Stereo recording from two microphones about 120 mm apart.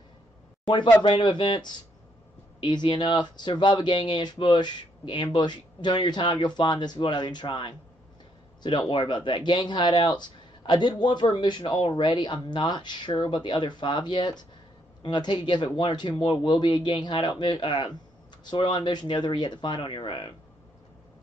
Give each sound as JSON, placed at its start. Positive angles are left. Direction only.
{"t": 1.0, "sound": "speech", "side_deg": 40}